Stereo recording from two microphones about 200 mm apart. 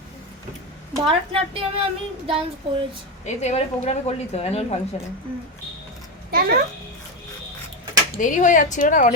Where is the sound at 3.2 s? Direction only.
35° left (ahead or behind).